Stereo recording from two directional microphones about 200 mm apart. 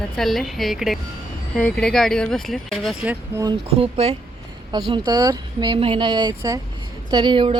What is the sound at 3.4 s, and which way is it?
Speech, 25° right (ahead or behind).